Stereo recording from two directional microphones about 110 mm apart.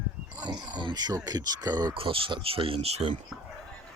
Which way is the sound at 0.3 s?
40° right (ahead or behind).